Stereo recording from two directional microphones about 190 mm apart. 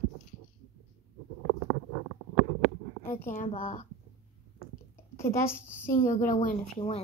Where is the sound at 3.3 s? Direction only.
45° left (ahead or behind).